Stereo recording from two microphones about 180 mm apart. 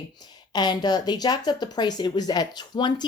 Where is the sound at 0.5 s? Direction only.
25° left (ahead or behind).